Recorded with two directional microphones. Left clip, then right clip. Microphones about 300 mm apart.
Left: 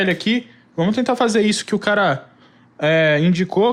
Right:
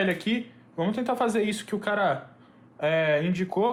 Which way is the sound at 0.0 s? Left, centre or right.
Left.